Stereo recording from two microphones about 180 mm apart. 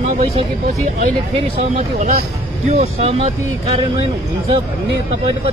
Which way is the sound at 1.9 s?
45° right (ahead or behind).